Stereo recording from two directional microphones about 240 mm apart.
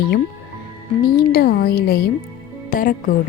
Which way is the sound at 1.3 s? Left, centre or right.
Left.